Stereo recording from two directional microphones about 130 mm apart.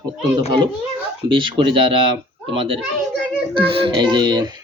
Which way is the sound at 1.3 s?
40° right (ahead or behind).